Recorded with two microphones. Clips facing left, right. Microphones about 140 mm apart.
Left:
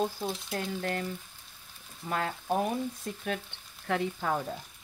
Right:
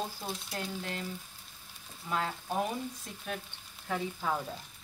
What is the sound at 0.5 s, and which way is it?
Frying, 55° left (ahead or behind).